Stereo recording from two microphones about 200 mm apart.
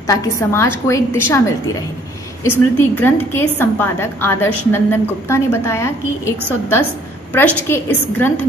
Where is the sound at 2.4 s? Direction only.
10° left (ahead or behind).